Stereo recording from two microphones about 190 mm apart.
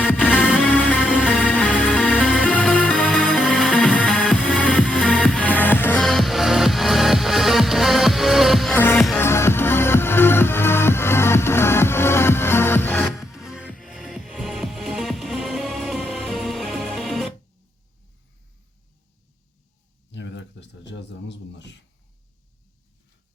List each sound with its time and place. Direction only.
0.4 s music: 5° right (ahead or behind)
0.7 s music: 10° left (ahead or behind)
0.9 s music: 5° right (ahead or behind)
1.5 s music: 5° left (ahead or behind)
9.1 s music: 15° left (ahead or behind)
20.1 s a sound: 70° left (ahead or behind)